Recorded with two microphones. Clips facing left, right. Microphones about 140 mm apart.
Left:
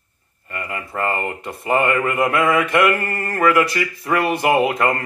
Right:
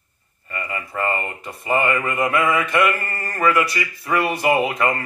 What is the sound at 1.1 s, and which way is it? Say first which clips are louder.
Mantra: left 3 dB; 60° left (ahead or behind).